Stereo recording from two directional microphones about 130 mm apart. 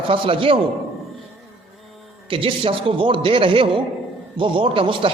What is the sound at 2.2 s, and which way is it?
A man's voice, 45° right (ahead or behind).